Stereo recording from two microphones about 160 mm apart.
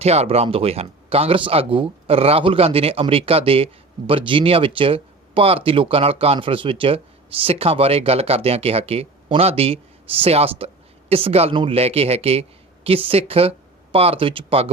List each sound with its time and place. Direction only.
0.0 s speech: 40° right (ahead or behind)